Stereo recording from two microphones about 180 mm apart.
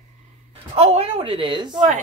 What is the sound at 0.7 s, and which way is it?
A woman's voice, 35° right (ahead or behind).